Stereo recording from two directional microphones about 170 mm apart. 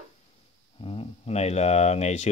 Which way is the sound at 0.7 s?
35° left (ahead or behind).